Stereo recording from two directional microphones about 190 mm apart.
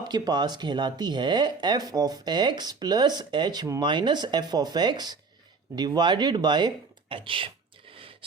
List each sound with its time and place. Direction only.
0.0 s speech: 20° right (ahead or behind)